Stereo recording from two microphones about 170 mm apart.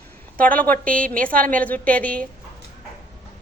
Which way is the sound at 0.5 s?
10° left (ahead or behind).